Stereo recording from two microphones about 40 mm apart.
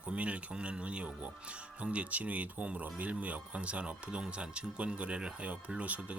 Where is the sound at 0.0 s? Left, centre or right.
Right.